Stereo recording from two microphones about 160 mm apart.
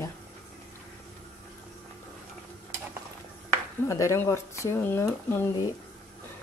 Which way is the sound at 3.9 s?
20° left (ahead or behind).